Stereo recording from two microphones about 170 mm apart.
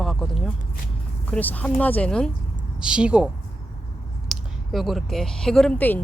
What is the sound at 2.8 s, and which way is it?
Speech, 5° right (ahead or behind).